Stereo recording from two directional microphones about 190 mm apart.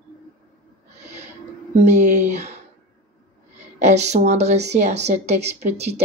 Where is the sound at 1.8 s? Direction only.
40° right (ahead or behind).